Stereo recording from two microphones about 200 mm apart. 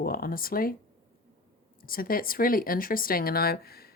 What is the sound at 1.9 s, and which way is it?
Speech, 45° left (ahead or behind).